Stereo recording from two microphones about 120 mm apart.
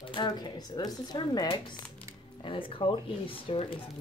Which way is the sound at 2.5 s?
45° left (ahead or behind).